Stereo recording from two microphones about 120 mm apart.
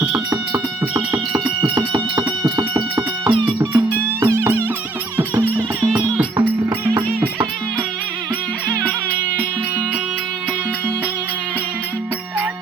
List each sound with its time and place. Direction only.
0.3 s music: 30° right (ahead or behind)
3.8 s music: 20° right (ahead or behind)